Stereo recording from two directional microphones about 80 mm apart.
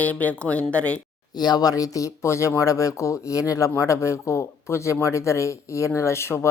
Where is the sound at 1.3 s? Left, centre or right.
Left.